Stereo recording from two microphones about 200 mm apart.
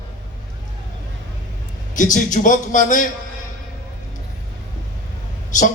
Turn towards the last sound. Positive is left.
turn(degrees=40)  # may be behind; listen again after turning